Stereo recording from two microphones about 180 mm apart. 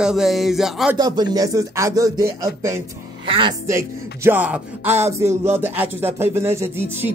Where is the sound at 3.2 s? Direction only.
30° right (ahead or behind).